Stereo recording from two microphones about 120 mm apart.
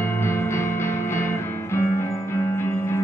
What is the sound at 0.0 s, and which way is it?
Music, 20° left (ahead or behind).